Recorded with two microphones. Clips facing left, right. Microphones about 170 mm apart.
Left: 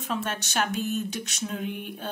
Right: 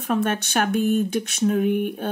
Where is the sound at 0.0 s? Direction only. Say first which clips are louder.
Right 8 dB; 55° right (ahead or behind).